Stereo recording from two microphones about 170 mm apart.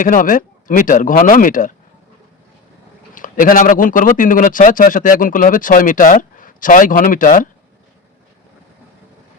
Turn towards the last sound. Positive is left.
turn(degrees=50)  # may be behind; listen again after turning